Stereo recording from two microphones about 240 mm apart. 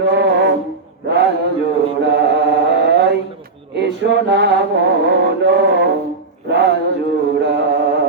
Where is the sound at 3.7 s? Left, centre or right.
Right.